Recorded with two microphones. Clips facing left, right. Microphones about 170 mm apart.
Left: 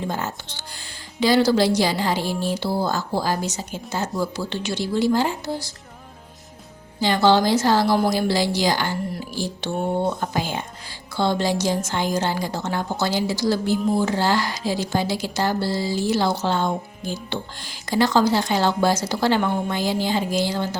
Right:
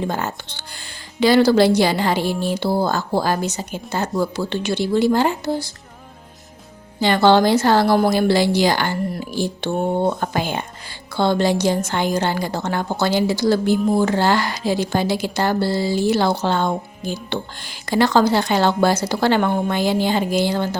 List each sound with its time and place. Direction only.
0.1 s a woman's voice: 60° right (ahead or behind)
7.0 s a woman's voice: 60° right (ahead or behind)